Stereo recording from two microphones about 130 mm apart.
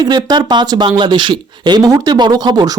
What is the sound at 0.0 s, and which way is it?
Speech, 35° right (ahead or behind).